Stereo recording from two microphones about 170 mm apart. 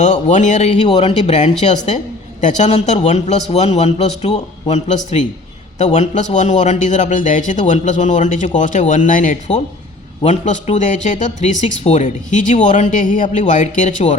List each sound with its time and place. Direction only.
0.0 s a man's voice: 45° left (ahead or behind)